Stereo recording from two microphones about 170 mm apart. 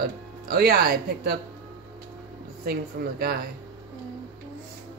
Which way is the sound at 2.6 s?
65° right (ahead or behind).